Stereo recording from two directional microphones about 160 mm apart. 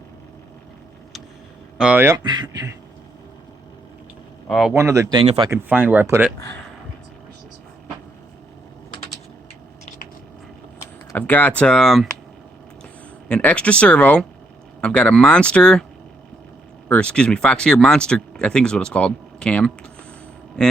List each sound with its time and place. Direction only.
1.8 s speech: 10° right (ahead or behind)
2.1 s speech: 25° right (ahead or behind)
4.4 s speech: centre (ahead or behind)
4.7 s speech: 15° right (ahead or behind)
11.1 s speech: 10° left (ahead or behind)
13.2 s speech: 5° left (ahead or behind)
16.9 s speech: 5° left (ahead or behind)